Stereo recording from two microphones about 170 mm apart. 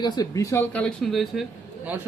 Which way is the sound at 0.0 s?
20° left (ahead or behind).